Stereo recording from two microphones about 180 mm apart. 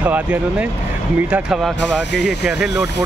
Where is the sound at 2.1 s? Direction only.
70° left (ahead or behind).